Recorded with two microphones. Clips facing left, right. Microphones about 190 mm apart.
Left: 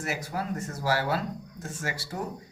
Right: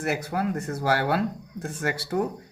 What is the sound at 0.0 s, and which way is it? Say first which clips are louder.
Speech: right 6 dB; 60° right (ahead or behind).